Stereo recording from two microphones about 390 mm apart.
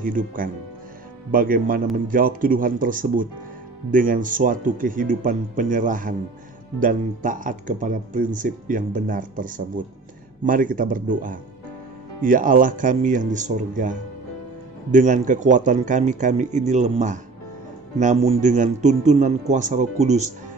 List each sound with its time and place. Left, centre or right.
0.0 s speech: right